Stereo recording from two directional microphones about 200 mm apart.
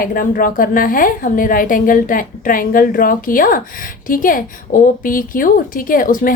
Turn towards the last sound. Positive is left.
turn(degrees=45)  # may be behind; listen again after turning